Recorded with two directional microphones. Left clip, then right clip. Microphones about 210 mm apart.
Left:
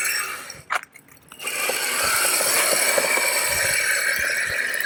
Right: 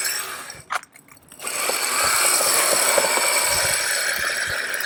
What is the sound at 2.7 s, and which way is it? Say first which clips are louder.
Vehicle: right 1 dB; 30° right (ahead or behind).